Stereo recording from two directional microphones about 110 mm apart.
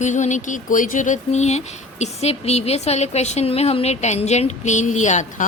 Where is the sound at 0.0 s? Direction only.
90° left.